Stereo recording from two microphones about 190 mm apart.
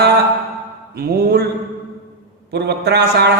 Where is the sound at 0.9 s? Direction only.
55° right (ahead or behind).